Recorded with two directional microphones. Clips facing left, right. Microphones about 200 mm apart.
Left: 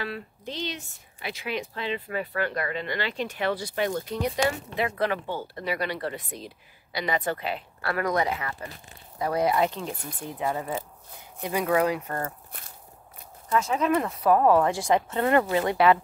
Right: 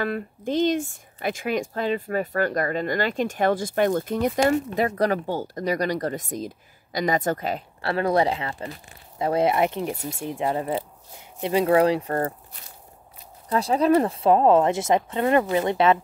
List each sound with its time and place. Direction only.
0.0 s speech: 50° right (ahead or behind)
7.8 s speech: 30° right (ahead or behind)
13.5 s speech: 35° right (ahead or behind)